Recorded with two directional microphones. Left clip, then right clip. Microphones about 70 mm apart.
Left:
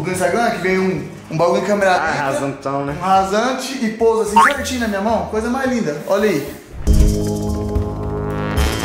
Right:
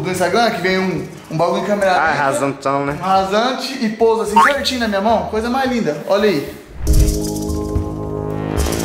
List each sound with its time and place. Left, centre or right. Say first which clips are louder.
0.3 s a man's voice: right 2 dB; centre
1.3 s a man's voice: left 1 dB; centre